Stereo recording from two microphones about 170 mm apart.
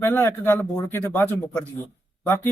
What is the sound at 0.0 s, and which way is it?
A man's voice, 15° left (ahead or behind).